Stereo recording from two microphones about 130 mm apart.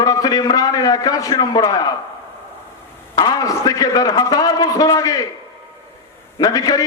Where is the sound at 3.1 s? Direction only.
30° left (ahead or behind).